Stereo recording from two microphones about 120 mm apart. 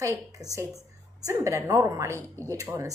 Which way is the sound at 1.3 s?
25° right (ahead or behind).